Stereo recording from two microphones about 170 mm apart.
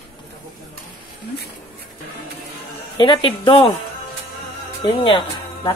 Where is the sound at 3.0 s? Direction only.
30° left (ahead or behind).